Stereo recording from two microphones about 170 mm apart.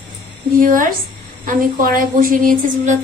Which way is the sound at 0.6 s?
50° right (ahead or behind).